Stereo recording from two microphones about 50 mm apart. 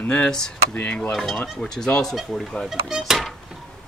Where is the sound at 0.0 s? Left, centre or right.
Left.